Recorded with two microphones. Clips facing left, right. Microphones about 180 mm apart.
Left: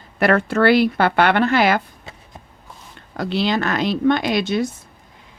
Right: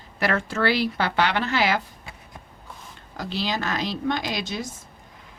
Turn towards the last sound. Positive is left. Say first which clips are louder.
# left 10 dB
turn(degrees=65)  # may be behind; listen again after turning